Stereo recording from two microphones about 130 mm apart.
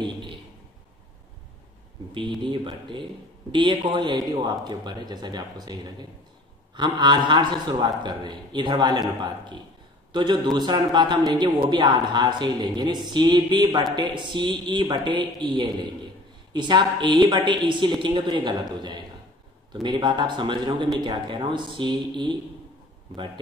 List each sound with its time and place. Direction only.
0.0 s a sound: 35° right (ahead or behind)
2.1 s a man's voice: 35° right (ahead or behind)
10.1 s a man's voice: 35° right (ahead or behind)